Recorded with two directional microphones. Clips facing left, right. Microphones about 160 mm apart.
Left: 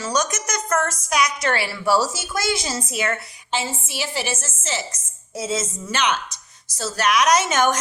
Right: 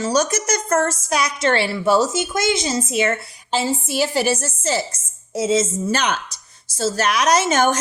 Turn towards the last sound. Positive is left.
turn(degrees=-30)  # may be behind; listen again after turning